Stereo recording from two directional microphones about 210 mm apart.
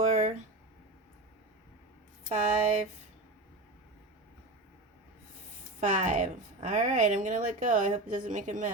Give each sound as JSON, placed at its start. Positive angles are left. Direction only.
{"t": 0.0, "sound": "a sound", "side_deg": -35}
{"t": 2.3, "sound": "a woman's voice", "side_deg": -35}
{"t": 5.8, "sound": "a woman's voice", "side_deg": -35}